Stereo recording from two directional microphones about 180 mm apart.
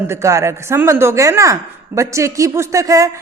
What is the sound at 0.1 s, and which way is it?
Speech, 15° right (ahead or behind).